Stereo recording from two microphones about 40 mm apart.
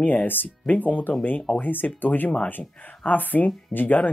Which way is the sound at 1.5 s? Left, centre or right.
Left.